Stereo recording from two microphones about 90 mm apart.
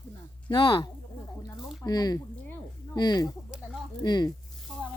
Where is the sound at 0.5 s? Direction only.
50° left (ahead or behind).